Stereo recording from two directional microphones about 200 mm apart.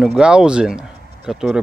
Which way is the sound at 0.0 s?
Centre (ahead or behind).